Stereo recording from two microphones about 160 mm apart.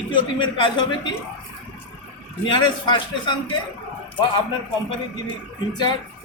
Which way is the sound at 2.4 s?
30° left (ahead or behind).